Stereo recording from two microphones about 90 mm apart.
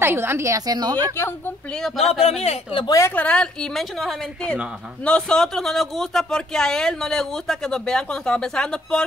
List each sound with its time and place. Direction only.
0.0 s a woman's voice: 25° right (ahead or behind); by 0.9 s 50° right (ahead or behind)
0.9 s a woman's voice: 25° left (ahead or behind)
1.7 s speech: 5° left (ahead or behind)